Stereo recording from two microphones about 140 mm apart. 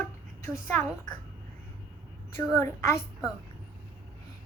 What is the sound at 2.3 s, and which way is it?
Speech, 20° left (ahead or behind).